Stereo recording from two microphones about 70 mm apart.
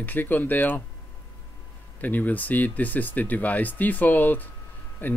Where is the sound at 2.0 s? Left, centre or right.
Left.